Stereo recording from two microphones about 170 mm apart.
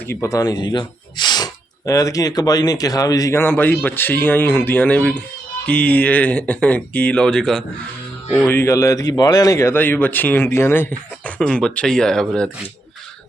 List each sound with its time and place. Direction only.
0.1 s speech: 15° left (ahead or behind)
8.4 s speech: 15° left (ahead or behind)
11.3 s speech: 5° left (ahead or behind)